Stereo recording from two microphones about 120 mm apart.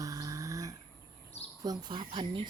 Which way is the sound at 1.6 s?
35° right (ahead or behind).